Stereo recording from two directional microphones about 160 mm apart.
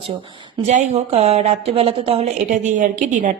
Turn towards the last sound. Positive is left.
turn(degrees=-50)  # may be behind; listen again after turning